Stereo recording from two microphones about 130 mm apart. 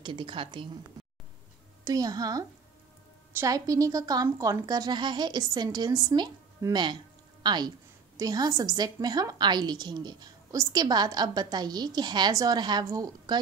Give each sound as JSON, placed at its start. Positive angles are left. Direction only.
{"t": 0.0, "sound": "a woman's voice", "side_deg": -40}
{"t": 1.9, "sound": "a woman's voice", "side_deg": -30}